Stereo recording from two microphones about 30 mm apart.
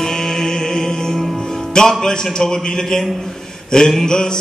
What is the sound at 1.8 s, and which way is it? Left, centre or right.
Speech, left.